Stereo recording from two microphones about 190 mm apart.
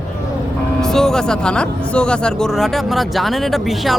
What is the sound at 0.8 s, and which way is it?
Speech, centre (ahead or behind).